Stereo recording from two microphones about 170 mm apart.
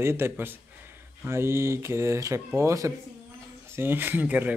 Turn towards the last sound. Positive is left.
turn(degrees=-10)  # may be behind; listen again after turning